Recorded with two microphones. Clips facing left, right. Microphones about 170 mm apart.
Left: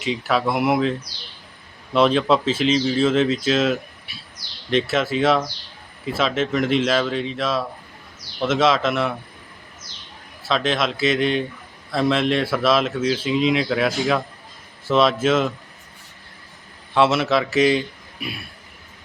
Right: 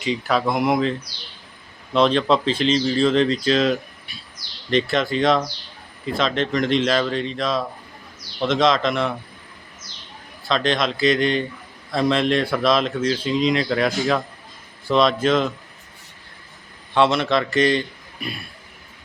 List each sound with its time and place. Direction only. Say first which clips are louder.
0.0 s speech: even; centre (ahead or behind)
10.5 s speech: even; 5° left (ahead or behind)
16.9 s a man's voice: even; 5° left (ahead or behind)